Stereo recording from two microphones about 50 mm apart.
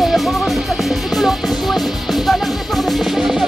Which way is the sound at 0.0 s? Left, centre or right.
Centre.